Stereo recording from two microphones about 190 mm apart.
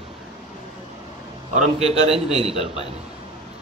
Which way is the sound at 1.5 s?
35° right (ahead or behind).